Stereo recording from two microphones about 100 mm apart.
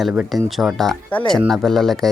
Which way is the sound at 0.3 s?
Centre (ahead or behind).